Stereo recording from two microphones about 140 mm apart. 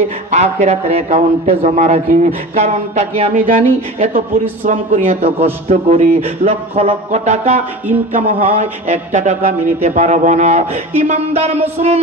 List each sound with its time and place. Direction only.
0.3 s a man's voice: 55° right (ahead or behind); by 4.2 s 80° right
4.6 s a man's voice: 60° right (ahead or behind)
5.2 s music: 50° right (ahead or behind)
8.1 s a man's voice: 75° right (ahead or behind); by 11.6 s 55° right (ahead or behind)